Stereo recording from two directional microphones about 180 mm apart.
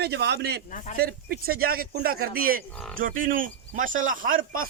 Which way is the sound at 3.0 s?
50° right (ahead or behind).